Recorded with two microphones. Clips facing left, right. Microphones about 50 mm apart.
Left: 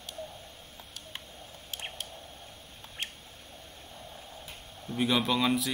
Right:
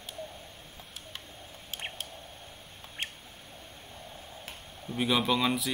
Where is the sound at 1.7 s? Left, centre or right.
Centre.